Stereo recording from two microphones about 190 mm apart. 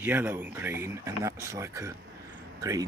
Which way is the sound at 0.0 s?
10° right (ahead or behind).